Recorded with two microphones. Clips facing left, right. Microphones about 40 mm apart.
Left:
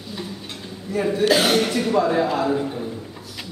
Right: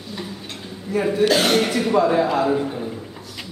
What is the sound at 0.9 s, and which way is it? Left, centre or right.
Speech, centre.